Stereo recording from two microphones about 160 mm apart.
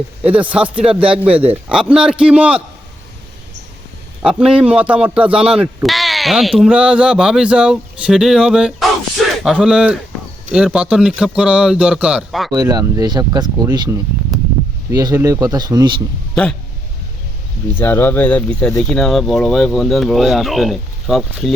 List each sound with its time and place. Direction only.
0.2 s a man's voice: 10° right (ahead or behind)
4.2 s a man's voice: 5° right (ahead or behind)
12.5 s speech: 20° right (ahead or behind)
16.3 s speech: 5° left (ahead or behind)
17.7 s a man's voice: 15° left (ahead or behind)